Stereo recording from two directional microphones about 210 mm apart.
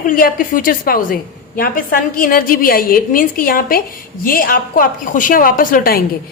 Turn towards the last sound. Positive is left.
turn(degrees=45)  # may be behind; listen again after turning